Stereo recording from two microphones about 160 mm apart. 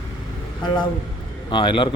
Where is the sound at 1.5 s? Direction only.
30° left (ahead or behind).